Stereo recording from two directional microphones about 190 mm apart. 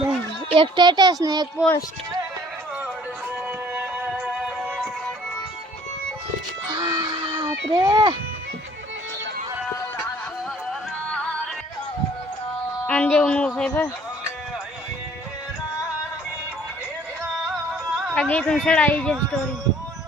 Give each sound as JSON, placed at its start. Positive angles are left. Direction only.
{"t": 0.5, "sound": "speech", "side_deg": -25}
{"t": 1.5, "sound": "speech", "side_deg": 15}
{"t": 3.8, "sound": "music", "side_deg": -10}
{"t": 6.7, "sound": "a sound", "side_deg": -20}
{"t": 7.8, "sound": "speech", "side_deg": -25}
{"t": 12.9, "sound": "speech", "side_deg": 5}
{"t": 17.9, "sound": "speech", "side_deg": 5}